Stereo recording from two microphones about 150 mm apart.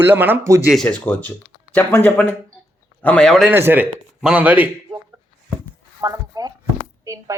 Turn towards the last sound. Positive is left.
turn(degrees=-20)  # may be behind; listen again after turning